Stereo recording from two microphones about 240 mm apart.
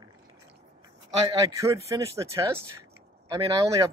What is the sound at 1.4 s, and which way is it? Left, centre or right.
Speech, centre.